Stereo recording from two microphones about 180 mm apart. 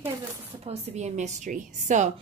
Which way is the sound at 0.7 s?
40° right (ahead or behind).